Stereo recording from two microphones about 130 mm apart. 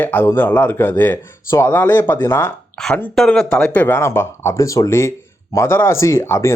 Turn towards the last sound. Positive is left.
turn(degrees=20)  # may be behind; listen again after turning